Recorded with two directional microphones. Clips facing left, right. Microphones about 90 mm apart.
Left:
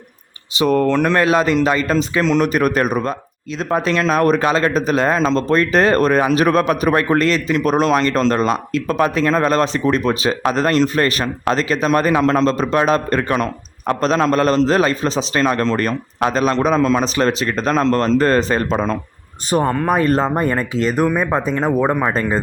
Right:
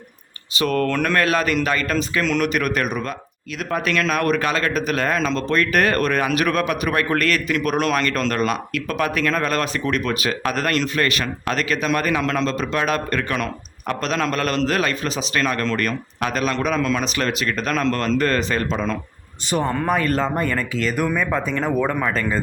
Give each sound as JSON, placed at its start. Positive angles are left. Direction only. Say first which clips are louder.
{"t": 0.5, "sound": "a man's voice", "louder": "left 5 dB", "side_deg": 20}
{"t": 18.7, "sound": "a man's voice", "louder": "left 5 dB", "side_deg": 40}